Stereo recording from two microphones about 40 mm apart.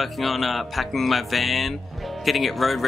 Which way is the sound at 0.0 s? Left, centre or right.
Centre.